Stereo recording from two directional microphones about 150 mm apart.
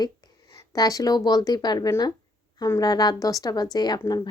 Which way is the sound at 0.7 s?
25° left (ahead or behind).